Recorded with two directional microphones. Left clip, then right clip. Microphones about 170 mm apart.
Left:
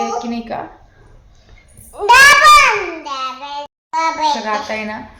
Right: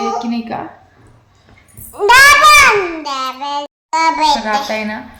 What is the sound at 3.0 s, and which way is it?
A child's voice, 45° right (ahead or behind).